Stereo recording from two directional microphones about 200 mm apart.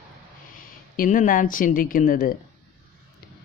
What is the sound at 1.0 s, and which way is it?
Speech, 40° left (ahead or behind).